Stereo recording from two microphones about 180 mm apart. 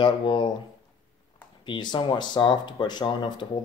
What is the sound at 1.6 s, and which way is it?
Speech, 25° left (ahead or behind).